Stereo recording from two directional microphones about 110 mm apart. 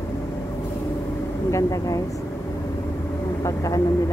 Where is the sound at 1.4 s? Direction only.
30° left (ahead or behind).